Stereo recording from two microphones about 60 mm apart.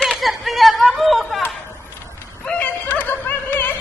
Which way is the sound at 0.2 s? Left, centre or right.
Centre.